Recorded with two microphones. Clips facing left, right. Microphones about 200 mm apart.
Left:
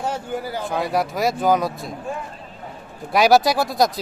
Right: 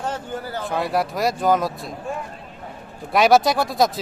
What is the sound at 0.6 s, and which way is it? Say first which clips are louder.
Speech: right 1 dB; centre (ahead or behind).